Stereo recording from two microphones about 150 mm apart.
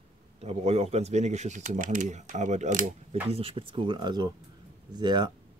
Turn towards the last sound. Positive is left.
turn(degrees=-30)  # may be behind; listen again after turning